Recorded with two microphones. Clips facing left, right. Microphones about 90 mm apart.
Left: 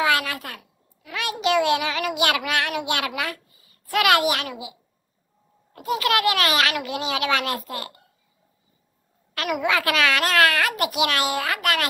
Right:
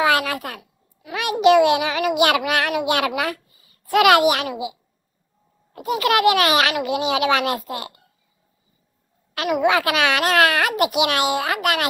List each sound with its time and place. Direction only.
0.0 s a sound: 30° right (ahead or behind)
1.4 s a child's voice: 25° right (ahead or behind)
5.7 s a child's voice: 35° left (ahead or behind)
5.9 s a child's voice: 30° right (ahead or behind)
9.4 s a child's voice: 30° right (ahead or behind)